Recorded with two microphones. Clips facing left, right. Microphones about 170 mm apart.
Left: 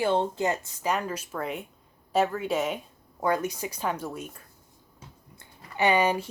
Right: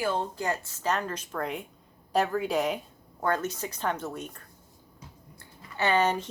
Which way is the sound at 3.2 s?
10° left (ahead or behind).